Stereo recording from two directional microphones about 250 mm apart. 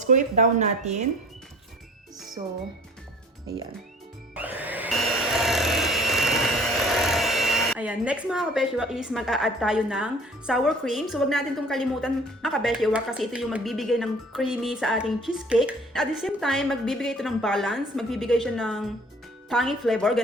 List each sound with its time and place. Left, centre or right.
0.0 s speech: right
2.4 s speech: centre
4.4 s wood: centre
19.5 s speech: centre